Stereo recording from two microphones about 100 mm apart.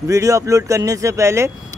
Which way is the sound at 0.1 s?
35° right (ahead or behind).